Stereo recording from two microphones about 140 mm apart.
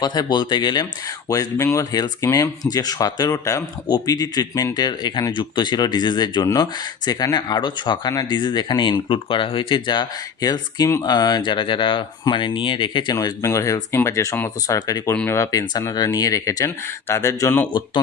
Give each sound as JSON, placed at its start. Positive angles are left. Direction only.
{"t": 0.0, "sound": "speech", "side_deg": 30}
{"t": 13.1, "sound": "speech", "side_deg": 20}
{"t": 15.1, "sound": "speech", "side_deg": 10}
{"t": 15.4, "sound": "speech", "side_deg": 25}
{"t": 17.7, "sound": "speech", "side_deg": 35}